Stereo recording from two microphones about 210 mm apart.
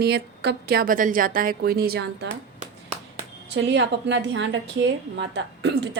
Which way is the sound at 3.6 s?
55° right (ahead or behind).